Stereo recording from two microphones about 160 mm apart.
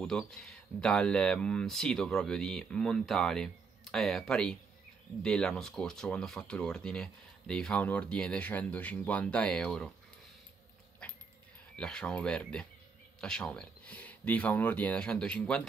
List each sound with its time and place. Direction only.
0.0 s speech: 5° left (ahead or behind)
11.0 s dog: 5° left (ahead or behind)
11.7 s speech: 5° left (ahead or behind)